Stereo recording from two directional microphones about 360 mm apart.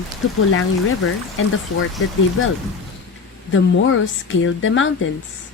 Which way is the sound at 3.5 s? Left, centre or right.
Left.